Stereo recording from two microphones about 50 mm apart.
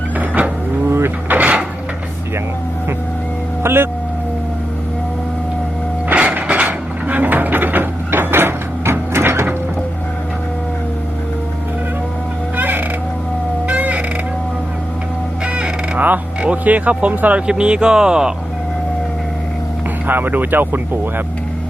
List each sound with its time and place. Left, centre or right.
0.2 s a sound: right
0.9 s vehicle: right
1.3 s wood: right
3.6 s vehicle: right
6.1 s wood: right
12.5 s a sound: right
13.7 s crow: right
15.4 s a sound: right
16.4 s speech: right
17.4 s speech: centre
20.1 s speech: right